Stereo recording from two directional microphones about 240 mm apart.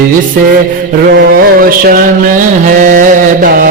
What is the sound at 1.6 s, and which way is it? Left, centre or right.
Music, right.